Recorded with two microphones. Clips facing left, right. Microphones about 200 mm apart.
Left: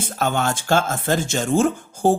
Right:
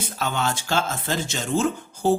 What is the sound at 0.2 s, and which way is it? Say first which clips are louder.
Speech: left 4 dB; 50° left (ahead or behind).